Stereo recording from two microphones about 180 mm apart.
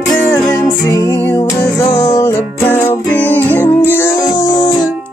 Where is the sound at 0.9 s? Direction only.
15° left (ahead or behind).